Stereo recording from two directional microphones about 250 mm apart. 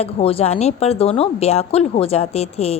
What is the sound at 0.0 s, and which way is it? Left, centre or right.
A woman's voice, left.